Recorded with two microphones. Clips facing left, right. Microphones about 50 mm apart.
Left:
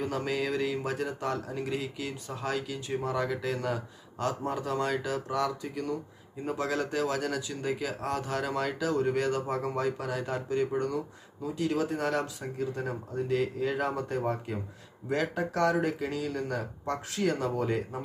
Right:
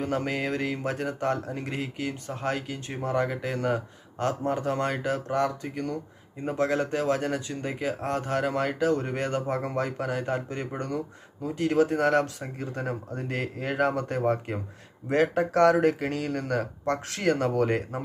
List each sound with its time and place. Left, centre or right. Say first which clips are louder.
0.0 s speech: right 2 dB; right
6.4 s speech: right 5 dB; right